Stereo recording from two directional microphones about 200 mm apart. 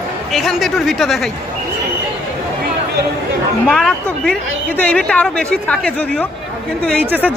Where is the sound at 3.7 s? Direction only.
5° left (ahead or behind).